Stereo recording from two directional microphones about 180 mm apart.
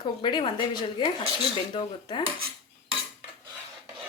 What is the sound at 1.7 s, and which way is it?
Speech, 25° left (ahead or behind).